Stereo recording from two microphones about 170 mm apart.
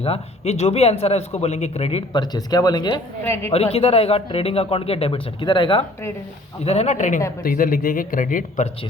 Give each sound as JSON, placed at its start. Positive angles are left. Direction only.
{"t": 0.0, "sound": "speech", "side_deg": 35}
{"t": 3.2, "sound": "a woman's voice", "side_deg": 15}
{"t": 3.5, "sound": "speech", "side_deg": 35}
{"t": 7.4, "sound": "speech", "side_deg": 55}